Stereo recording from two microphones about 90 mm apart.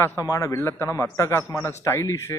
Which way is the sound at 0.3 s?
35° left (ahead or behind).